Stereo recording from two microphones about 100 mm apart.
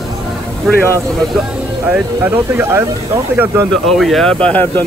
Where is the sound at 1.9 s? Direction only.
15° right (ahead or behind).